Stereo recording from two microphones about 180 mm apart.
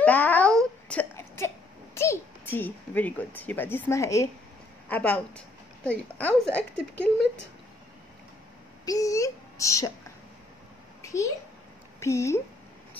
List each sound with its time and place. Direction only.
0.0 s a sound: 10° left (ahead or behind)
2.0 s a child's voice: 15° left (ahead or behind)
8.8 s speech: 20° left (ahead or behind)
11.0 s a child's voice: 15° left (ahead or behind)